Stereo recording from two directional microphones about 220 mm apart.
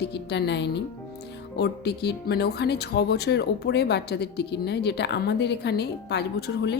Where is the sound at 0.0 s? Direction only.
50° left (ahead or behind).